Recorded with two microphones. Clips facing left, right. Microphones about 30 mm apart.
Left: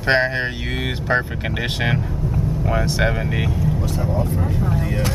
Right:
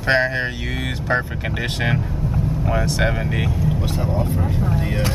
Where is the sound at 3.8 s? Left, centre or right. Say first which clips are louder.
Even; right.